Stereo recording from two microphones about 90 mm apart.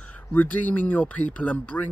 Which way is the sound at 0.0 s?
20° left (ahead or behind).